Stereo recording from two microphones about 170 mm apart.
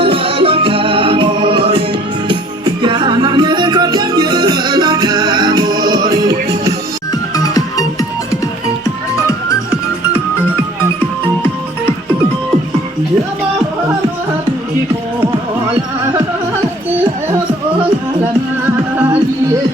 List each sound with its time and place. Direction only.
0.0 s music: 35° right (ahead or behind)
7.3 s music: 20° left (ahead or behind)